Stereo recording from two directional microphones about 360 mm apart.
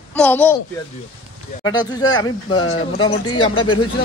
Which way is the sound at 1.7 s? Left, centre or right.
Centre.